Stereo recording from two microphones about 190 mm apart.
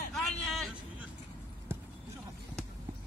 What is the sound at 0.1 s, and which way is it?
Vehicle, centre (ahead or behind).